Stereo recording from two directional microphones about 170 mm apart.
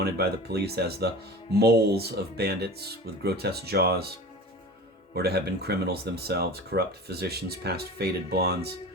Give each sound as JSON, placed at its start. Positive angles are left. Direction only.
{"t": 0.0, "sound": "speech", "side_deg": -70}
{"t": 5.1, "sound": "speech", "side_deg": -70}